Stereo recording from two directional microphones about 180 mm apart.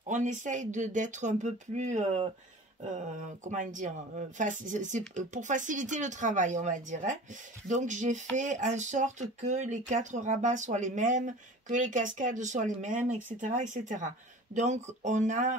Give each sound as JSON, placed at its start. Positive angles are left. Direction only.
{"t": 0.1, "sound": "speech", "side_deg": -45}
{"t": 3.4, "sound": "speech", "side_deg": -45}